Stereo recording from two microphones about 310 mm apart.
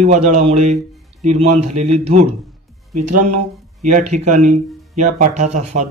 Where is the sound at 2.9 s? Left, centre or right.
Right.